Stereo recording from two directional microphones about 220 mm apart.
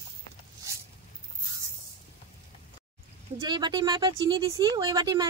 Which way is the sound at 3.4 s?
20° right (ahead or behind).